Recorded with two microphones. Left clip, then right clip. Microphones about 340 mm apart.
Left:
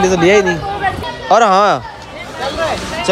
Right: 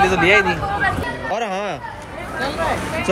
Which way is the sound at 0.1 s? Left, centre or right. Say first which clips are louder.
Left 4 dB; left.